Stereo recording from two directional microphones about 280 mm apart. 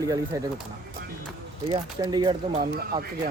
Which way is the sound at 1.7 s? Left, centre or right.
Centre.